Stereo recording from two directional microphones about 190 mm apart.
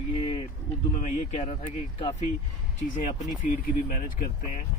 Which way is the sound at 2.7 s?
40° left (ahead or behind).